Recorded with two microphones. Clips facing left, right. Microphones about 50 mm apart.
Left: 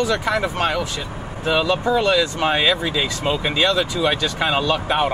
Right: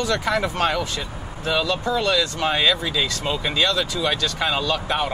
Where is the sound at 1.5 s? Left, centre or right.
Centre.